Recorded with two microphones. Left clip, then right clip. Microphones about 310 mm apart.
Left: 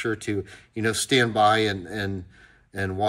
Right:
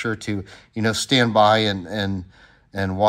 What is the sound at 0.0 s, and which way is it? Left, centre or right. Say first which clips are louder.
Speech: right 1 dB; centre.